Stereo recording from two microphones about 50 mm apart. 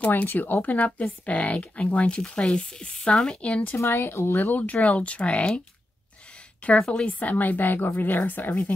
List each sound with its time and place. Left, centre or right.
0.0 s a woman's voice: left
3.7 s speech: left
4.5 s speech: left
6.9 s a woman's voice: centre
7.2 s a woman's voice: left